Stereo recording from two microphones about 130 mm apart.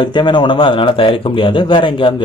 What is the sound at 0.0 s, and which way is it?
Speech, 35° left (ahead or behind).